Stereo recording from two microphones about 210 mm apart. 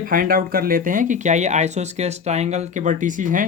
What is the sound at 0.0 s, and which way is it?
Speech, 40° right (ahead or behind).